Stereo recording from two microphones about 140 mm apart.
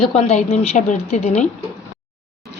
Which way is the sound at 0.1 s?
45° left (ahead or behind).